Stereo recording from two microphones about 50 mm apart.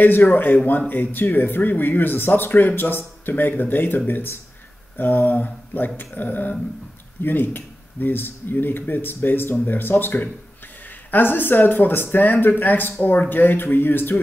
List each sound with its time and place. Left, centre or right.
0.0 s speech: left